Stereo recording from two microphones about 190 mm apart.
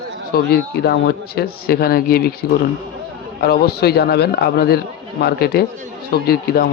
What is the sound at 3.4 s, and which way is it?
A man's voice, 55° left (ahead or behind).